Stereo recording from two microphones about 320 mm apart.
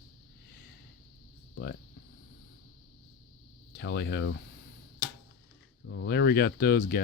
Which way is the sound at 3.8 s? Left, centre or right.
Left.